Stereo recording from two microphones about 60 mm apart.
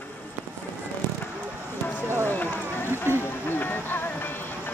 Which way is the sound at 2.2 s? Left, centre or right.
Left.